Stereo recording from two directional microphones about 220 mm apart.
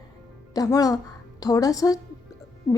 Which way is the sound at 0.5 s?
15° left (ahead or behind).